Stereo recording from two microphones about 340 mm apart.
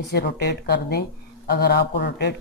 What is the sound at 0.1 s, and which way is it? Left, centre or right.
Speech, left.